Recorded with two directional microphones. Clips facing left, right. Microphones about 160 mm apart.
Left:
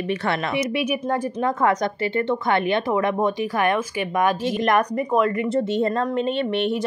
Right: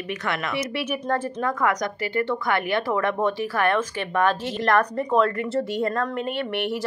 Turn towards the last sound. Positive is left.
turn(degrees=20)  # may be behind; listen again after turning